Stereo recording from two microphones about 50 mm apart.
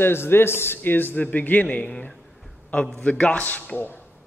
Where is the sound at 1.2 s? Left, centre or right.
Left.